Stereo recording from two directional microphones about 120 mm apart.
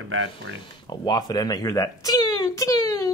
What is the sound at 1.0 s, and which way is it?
Speech, 35° left (ahead or behind).